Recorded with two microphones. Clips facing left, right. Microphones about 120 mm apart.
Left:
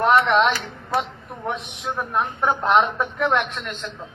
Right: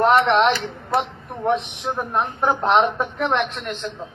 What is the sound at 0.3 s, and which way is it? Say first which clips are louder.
Speech: right 2 dB; 30° right (ahead or behind).